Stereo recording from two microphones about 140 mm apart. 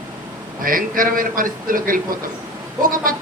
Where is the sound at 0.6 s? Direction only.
80° right.